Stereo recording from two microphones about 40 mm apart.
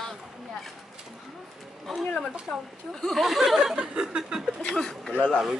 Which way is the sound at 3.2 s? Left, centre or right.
Centre.